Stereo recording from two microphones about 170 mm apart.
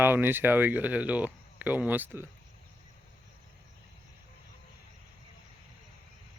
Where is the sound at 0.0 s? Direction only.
10° right (ahead or behind).